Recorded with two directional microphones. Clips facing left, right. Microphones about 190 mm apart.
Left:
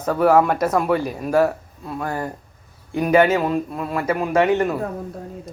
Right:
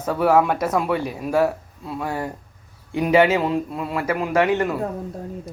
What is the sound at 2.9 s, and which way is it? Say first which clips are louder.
A man's voice: left 1 dB; 20° right (ahead or behind).